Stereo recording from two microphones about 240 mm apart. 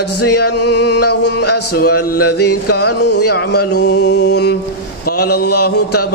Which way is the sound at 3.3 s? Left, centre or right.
Left.